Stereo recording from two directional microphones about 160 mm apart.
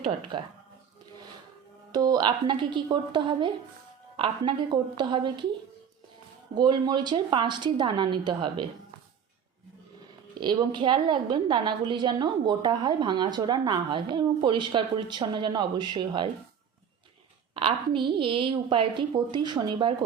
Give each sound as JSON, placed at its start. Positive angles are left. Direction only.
{"t": 0.3, "sound": "a woman's voice", "side_deg": -30}
{"t": 1.9, "sound": "a woman's voice", "side_deg": -25}
{"t": 6.5, "sound": "a woman's voice", "side_deg": -25}
{"t": 10.4, "sound": "a woman's voice", "side_deg": -25}
{"t": 17.5, "sound": "a woman's voice", "side_deg": -35}